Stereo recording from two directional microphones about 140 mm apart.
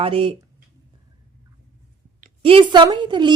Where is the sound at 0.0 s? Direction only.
40° right (ahead or behind).